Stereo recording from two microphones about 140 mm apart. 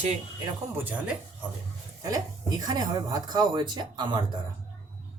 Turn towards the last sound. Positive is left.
turn(degrees=-35)  # may be behind; listen again after turning